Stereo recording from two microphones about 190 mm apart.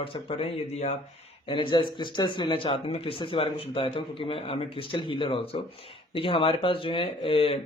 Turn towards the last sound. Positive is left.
turn(degrees=30)  # may be behind; listen again after turning